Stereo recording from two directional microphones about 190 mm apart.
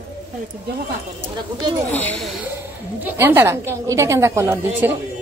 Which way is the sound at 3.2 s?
10° right (ahead or behind).